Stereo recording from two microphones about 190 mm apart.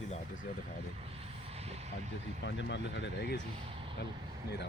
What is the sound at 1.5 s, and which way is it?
Vehicle, 35° right (ahead or behind).